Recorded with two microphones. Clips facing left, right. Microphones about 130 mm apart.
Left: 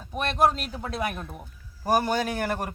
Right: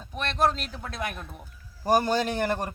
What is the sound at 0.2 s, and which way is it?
Speech, 10° left (ahead or behind).